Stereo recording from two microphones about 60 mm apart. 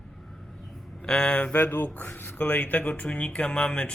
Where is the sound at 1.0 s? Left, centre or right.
Centre.